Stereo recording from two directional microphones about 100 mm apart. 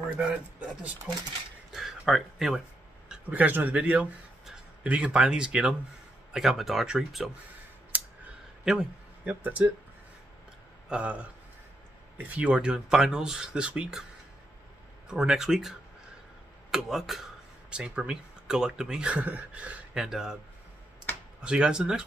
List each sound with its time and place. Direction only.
0.2 s speech: 10° right (ahead or behind)
3.1 s speech: 15° right (ahead or behind)
8.6 s a man's voice: 10° right (ahead or behind)
10.9 s speech: 10° right (ahead or behind)
15.0 s speech: 5° right (ahead or behind)
16.7 s speech: centre (ahead or behind)
21.4 s speech: 10° right (ahead or behind)